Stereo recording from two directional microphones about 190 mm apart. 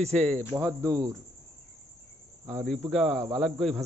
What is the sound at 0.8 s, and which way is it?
Speech, 20° right (ahead or behind).